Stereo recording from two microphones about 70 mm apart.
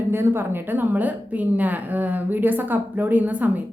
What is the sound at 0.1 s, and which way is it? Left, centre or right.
A woman's voice, right.